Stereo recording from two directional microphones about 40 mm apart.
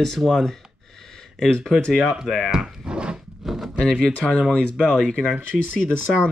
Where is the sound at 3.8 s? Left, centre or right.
Left.